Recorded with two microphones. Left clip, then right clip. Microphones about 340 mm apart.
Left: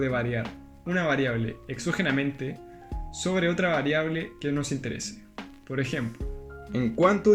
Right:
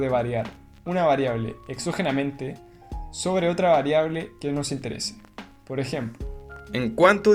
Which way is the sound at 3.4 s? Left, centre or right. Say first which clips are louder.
Right 6 dB; centre.